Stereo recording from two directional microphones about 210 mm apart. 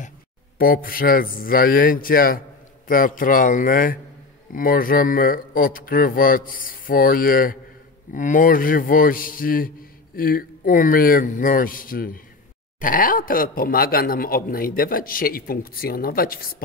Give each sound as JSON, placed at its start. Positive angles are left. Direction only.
{"t": 0.8, "sound": "a man's voice", "side_deg": 45}